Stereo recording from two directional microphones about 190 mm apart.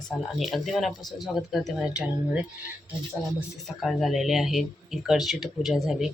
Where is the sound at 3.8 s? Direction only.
Centre (ahead or behind).